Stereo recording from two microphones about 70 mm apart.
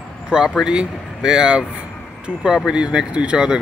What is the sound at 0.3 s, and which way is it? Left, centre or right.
Speech, centre.